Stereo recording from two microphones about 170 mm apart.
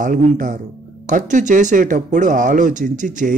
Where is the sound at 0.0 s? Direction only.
50° right (ahead or behind).